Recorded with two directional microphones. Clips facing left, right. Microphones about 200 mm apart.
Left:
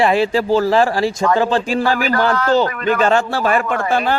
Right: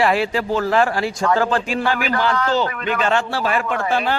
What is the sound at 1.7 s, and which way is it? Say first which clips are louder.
A man's voice: left 4 dB; 35° left (ahead or behind).